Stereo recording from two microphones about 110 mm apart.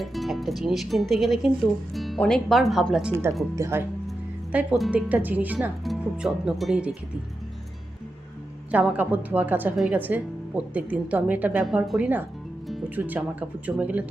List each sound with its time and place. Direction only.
0.0 s speech: centre (ahead or behind)
1.9 s music: centre (ahead or behind)
2.1 s speech: 5° left (ahead or behind)
3.5 s speech: 25° right (ahead or behind)
4.5 s speech: 10° right (ahead or behind)
5.8 s speech: centre (ahead or behind)
8.8 s speech: 10° right (ahead or behind)
11.6 s speech: 5° right (ahead or behind)